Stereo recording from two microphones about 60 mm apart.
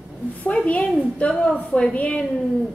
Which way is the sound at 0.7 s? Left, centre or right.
Left.